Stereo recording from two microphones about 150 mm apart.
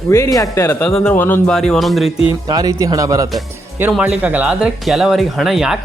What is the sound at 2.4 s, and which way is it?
Speech, 25° right (ahead or behind).